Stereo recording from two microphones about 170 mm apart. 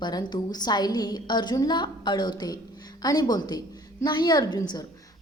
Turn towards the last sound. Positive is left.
turn(degrees=25)  # may be behind; listen again after turning